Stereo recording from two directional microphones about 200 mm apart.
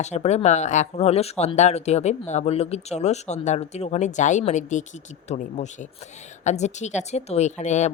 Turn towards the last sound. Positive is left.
turn(degrees=35)  # may be behind; listen again after turning